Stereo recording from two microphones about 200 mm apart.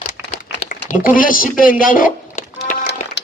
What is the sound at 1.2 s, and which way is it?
Speech, 45° left (ahead or behind).